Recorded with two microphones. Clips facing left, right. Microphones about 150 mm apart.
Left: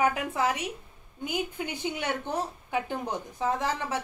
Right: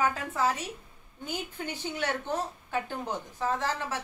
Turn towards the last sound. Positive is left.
turn(degrees=15)  # may be behind; listen again after turning